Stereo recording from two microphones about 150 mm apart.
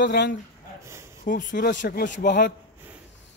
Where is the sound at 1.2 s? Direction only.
60° left (ahead or behind); by 2.5 s 90° left.